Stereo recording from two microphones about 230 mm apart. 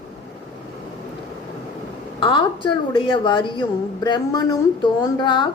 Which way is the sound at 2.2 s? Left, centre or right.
Left.